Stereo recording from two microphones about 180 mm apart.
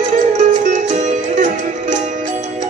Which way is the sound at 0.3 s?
40° right (ahead or behind).